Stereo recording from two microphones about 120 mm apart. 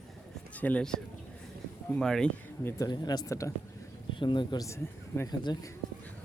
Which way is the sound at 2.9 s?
35° left (ahead or behind).